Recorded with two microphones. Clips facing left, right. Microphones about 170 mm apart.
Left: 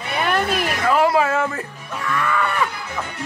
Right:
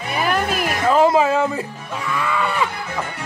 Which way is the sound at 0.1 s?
Centre (ahead or behind).